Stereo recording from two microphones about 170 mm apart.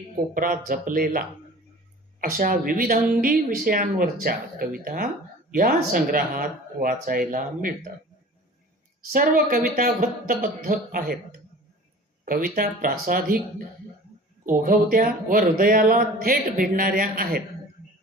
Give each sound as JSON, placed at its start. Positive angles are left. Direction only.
{"t": 0.3, "sound": "speech", "side_deg": -55}
{"t": 2.2, "sound": "speech", "side_deg": -55}
{"t": 9.1, "sound": "speech", "side_deg": -55}
{"t": 14.4, "sound": "speech", "side_deg": -55}